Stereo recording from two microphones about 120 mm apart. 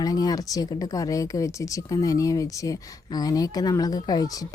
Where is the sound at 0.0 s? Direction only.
30° left (ahead or behind).